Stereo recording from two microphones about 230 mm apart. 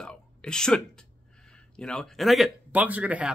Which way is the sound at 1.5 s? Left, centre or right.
Centre.